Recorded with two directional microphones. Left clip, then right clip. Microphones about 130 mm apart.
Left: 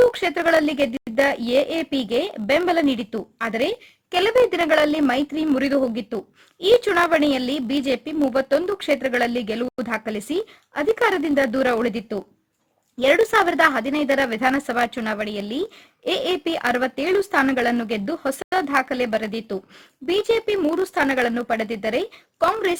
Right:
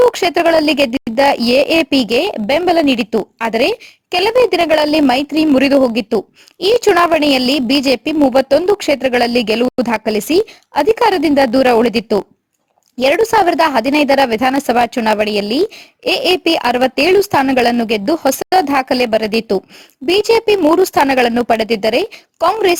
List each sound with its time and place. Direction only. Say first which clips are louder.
0.1 s speech: right 7 dB; 45° right (ahead or behind)
4.1 s a woman's voice: right 6 dB; 35° right (ahead or behind); by 12.2 s 55° right (ahead or behind)
13.0 s a woman's voice: right 5 dB; 40° right (ahead or behind)